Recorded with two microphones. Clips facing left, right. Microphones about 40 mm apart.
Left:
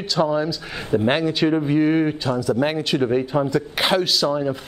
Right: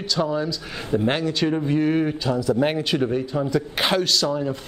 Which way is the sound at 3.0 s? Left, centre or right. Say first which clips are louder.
Left 3 dB; centre.